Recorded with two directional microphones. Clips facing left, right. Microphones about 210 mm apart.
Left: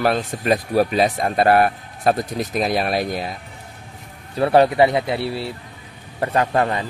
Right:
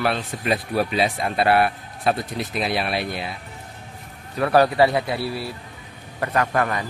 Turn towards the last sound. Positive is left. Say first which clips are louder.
# left 3 dB
turn(degrees=25)  # may be behind; listen again after turning